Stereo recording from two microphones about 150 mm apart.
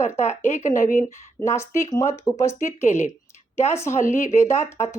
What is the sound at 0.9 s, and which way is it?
Speech, 20° left (ahead or behind).